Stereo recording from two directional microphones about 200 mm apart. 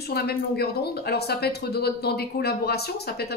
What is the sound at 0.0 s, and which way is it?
A woman's voice, 50° left (ahead or behind).